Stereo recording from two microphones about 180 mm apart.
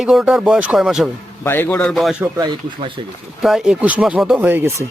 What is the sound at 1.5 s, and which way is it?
Speech, 10° left (ahead or behind).